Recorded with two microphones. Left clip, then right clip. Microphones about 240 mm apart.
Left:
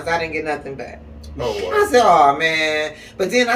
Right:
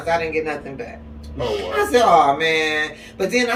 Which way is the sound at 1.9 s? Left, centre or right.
Centre.